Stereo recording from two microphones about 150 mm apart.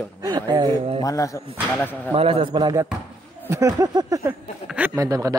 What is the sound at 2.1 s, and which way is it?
Speech, 40° right (ahead or behind).